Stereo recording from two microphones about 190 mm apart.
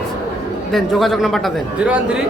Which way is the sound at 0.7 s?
Centre (ahead or behind).